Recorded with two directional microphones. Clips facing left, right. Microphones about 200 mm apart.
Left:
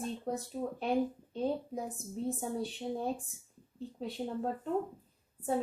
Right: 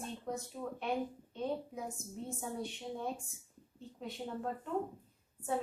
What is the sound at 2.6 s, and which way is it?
Speech, 35° left (ahead or behind).